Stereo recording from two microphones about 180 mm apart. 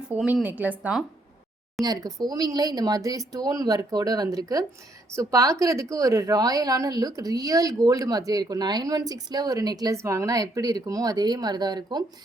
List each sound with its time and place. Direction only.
0.1 s speech: 5° right (ahead or behind)
1.8 s a woman's voice: 20° right (ahead or behind)